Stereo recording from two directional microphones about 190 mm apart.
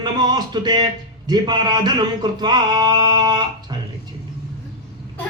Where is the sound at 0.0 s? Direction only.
20° right (ahead or behind).